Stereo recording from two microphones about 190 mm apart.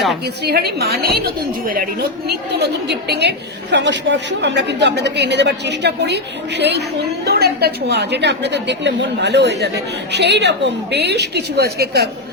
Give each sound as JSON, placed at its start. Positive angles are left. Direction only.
{"t": 0.4, "sound": "a woman's voice", "side_deg": -55}